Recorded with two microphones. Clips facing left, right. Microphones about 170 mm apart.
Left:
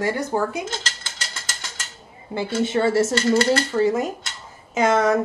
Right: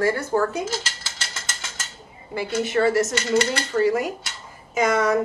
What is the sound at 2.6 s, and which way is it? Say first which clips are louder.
Speech: left 1 dB; 25° left (ahead or behind).